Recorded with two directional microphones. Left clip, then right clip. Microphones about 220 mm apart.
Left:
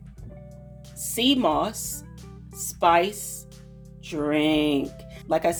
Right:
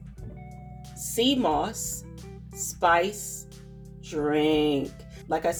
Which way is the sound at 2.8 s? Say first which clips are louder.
Left 2 dB; 40° left (ahead or behind).